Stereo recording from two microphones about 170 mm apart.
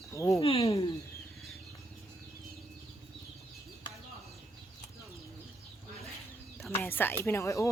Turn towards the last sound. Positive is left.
turn(degrees=15)  # may be behind; listen again after turning